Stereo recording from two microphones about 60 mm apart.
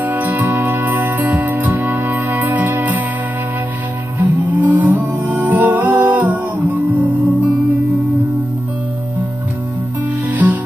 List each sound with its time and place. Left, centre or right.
0.0 s music: right
4.2 s music: right
10.3 s music: right